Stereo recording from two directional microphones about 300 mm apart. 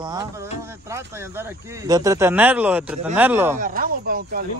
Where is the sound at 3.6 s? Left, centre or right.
Right.